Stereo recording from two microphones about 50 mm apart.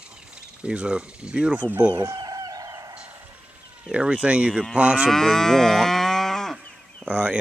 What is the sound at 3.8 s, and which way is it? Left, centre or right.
Speech, centre.